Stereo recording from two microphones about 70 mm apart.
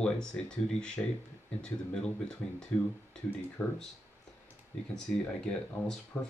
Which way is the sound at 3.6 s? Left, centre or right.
Left.